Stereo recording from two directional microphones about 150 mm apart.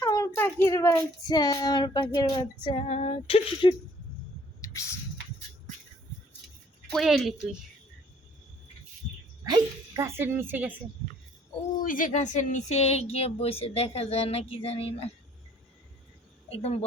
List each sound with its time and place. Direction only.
0.0 s child singing: 20° left (ahead or behind); by 3.8 s 35° left (ahead or behind)
6.9 s speech: centre (ahead or behind)
9.4 s a woman's voice: 20° right (ahead or behind)
11.8 s a woman's voice: 65° left (ahead or behind); by 15.1 s 40° left (ahead or behind)
16.5 s a woman's voice: 40° left (ahead or behind)